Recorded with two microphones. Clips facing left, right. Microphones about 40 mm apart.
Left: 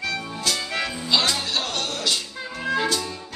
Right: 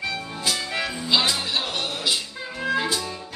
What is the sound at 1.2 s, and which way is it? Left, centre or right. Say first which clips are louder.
Music: even; centre.